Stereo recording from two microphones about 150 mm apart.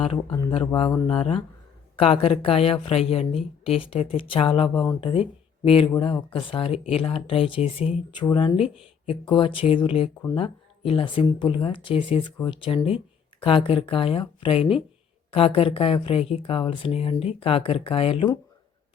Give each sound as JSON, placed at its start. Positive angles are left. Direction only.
{"t": 0.0, "sound": "speech", "side_deg": 35}